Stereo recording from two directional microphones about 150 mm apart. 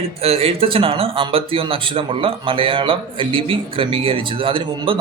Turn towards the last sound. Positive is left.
turn(degrees=-35)  # may be behind; listen again after turning